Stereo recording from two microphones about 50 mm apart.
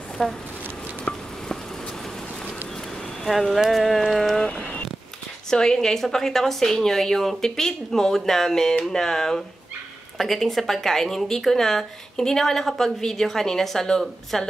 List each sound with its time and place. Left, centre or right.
0.2 s speech: centre
1.1 s insect: left
3.3 s speech: centre
4.5 s a sound: left
5.5 s speech: centre